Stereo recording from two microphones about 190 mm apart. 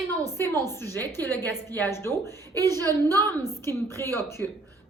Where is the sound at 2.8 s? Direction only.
20° right (ahead or behind).